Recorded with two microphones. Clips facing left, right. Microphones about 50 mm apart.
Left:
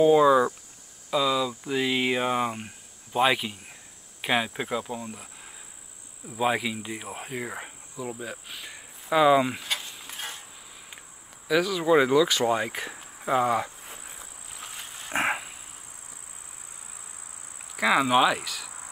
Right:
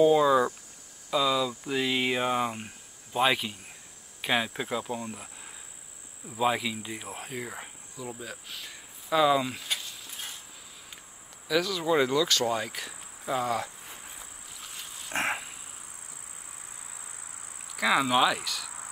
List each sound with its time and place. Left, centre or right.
0.0 s speech: centre
6.2 s speech: centre
11.4 s speech: centre
15.0 s a sound: centre
17.7 s speech: centre